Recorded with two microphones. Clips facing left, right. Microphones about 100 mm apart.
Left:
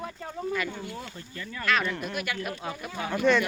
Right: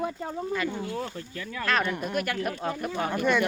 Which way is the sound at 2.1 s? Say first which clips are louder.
Right 4 dB; 40° right (ahead or behind).